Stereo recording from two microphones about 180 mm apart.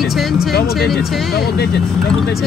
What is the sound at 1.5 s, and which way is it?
Speech, 65° left (ahead or behind).